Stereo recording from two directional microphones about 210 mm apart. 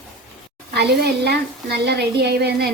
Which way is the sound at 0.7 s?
50° right (ahead or behind).